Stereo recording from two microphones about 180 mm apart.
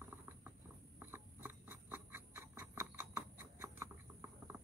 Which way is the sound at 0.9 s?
10° right (ahead or behind).